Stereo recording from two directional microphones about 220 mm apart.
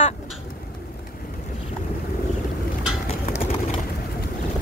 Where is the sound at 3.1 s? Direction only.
25° left (ahead or behind).